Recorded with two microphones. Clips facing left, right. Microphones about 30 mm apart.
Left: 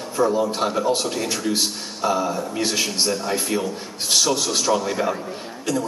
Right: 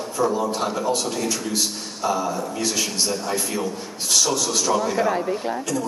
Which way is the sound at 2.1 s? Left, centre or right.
Left.